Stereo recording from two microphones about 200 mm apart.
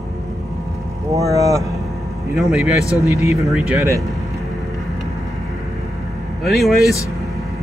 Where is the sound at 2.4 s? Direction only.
Centre (ahead or behind).